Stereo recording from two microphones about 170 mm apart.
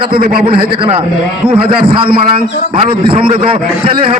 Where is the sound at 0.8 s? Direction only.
35° right (ahead or behind).